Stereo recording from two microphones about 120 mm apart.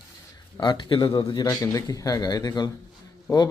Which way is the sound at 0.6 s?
40° left (ahead or behind).